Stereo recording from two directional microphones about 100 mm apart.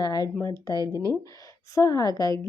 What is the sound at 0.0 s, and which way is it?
A woman's voice, 40° left (ahead or behind).